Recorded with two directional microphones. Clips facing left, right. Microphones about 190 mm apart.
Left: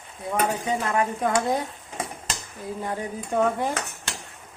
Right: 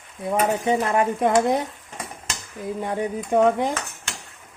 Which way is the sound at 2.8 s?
20° right (ahead or behind).